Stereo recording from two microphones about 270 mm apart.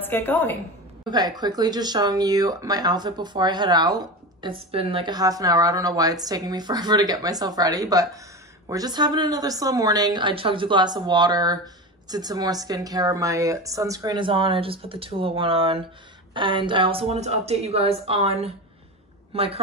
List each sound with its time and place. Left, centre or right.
0.0 s a woman's voice: centre
1.0 s a woman's voice: centre